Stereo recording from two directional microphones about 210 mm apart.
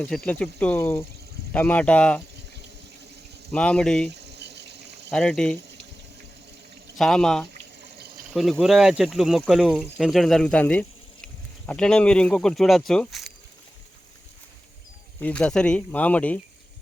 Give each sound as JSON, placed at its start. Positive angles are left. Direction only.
{"t": 0.0, "sound": "speech", "side_deg": 5}
{"t": 3.5, "sound": "speech", "side_deg": 5}
{"t": 4.1, "sound": "insect", "side_deg": -55}
{"t": 5.1, "sound": "speech", "side_deg": 5}
{"t": 6.9, "sound": "speech", "side_deg": 0}
{"t": 7.9, "sound": "insect", "side_deg": -50}
{"t": 8.3, "sound": "speech", "side_deg": 5}
{"t": 15.2, "sound": "speech", "side_deg": 5}